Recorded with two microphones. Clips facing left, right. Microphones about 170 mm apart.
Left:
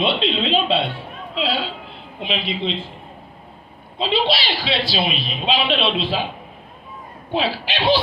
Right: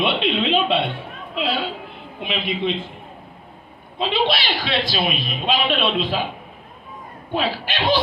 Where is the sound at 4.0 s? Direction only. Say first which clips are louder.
Left 1 dB; 50° right (ahead or behind).